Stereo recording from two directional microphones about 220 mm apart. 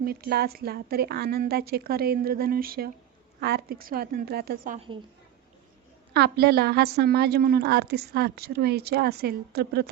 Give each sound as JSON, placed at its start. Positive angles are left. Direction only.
{"t": 0.0, "sound": "a woman's voice", "side_deg": -45}
{"t": 6.1, "sound": "a woman's voice", "side_deg": -45}